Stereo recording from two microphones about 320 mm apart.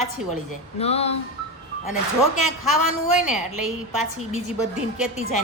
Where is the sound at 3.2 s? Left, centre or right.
Centre.